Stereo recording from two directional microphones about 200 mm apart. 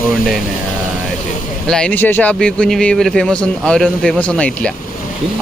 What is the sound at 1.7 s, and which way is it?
A man's voice, 5° left (ahead or behind).